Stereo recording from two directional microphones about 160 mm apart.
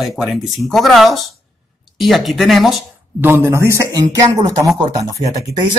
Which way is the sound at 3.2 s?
15° right (ahead or behind).